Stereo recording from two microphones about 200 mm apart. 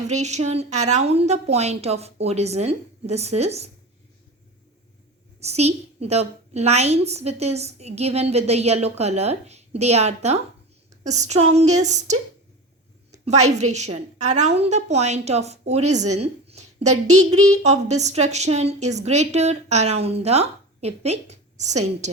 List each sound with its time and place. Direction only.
0.0 s a woman's voice: 35° right (ahead or behind)
5.4 s a woman's voice: 30° right (ahead or behind)
13.1 s a sound: 35° right (ahead or behind)
13.6 s a woman's voice: 35° right (ahead or behind)